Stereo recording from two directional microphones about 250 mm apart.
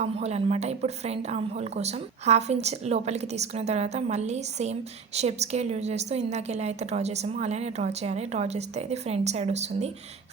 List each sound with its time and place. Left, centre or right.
0.0 s speech: right